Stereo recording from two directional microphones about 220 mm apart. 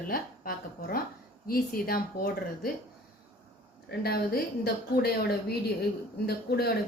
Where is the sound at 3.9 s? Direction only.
45° left (ahead or behind).